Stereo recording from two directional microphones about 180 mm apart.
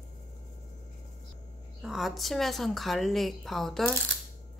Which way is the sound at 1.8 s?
Centre (ahead or behind).